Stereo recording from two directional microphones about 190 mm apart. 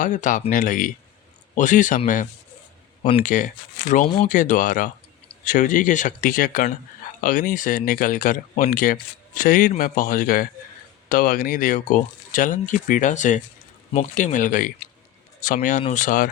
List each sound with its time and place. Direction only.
0.0 s speech: 40° left (ahead or behind)
3.2 s speech: 45° left (ahead or behind)